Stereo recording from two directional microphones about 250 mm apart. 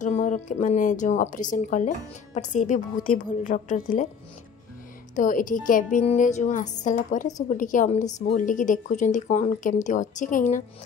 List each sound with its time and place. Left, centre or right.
0.0 s a woman's voice: left
5.1 s a woman's voice: left